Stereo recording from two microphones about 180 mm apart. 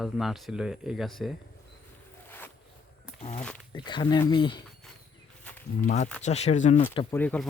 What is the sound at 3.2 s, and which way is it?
Speech, 40° left (ahead or behind).